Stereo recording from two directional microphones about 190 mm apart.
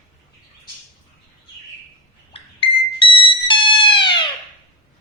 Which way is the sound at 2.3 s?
25° left (ahead or behind).